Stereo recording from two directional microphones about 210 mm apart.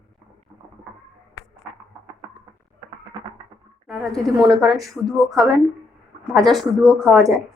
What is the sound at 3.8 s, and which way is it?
A woman's voice, centre (ahead or behind).